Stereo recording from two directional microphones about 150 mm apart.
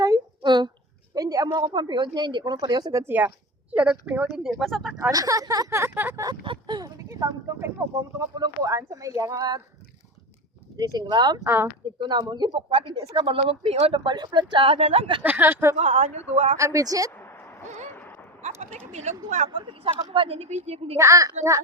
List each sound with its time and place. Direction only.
0.0 s a sound: 25° right (ahead or behind)
1.1 s speech: 25° right (ahead or behind); by 4.9 s centre (ahead or behind)
5.1 s speech: 25° right (ahead or behind)
6.4 s speech: 30° right (ahead or behind)
11.1 s speech: 30° right (ahead or behind)
11.4 s speech: 15° right (ahead or behind)
12.0 s speech: 30° right (ahead or behind)
15.2 s speech: 15° right (ahead or behind)
15.7 s speech: 45° right (ahead or behind)
16.6 s speech: 20° right (ahead or behind)
18.9 s speech: 50° right (ahead or behind)
19.5 s speech: 35° right (ahead or behind)
21.0 s speech: 20° right (ahead or behind)